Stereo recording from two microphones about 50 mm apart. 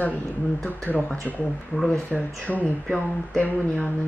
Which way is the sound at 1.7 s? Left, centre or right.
Left.